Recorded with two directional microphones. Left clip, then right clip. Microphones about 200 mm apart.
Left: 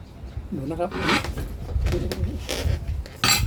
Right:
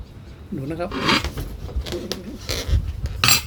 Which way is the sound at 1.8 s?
5° right (ahead or behind).